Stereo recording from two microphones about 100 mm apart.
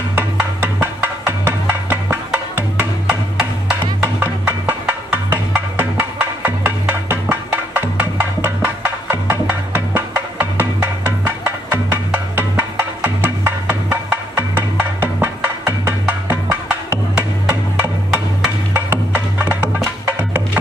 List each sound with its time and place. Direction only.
0.1 s music: 20° right (ahead or behind)
18.7 s music: 20° right (ahead or behind)